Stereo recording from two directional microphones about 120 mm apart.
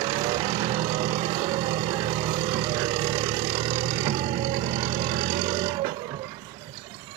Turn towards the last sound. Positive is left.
turn(degrees=-45)  # may be behind; listen again after turning